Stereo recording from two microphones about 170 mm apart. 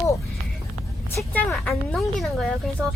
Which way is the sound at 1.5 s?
Centre (ahead or behind).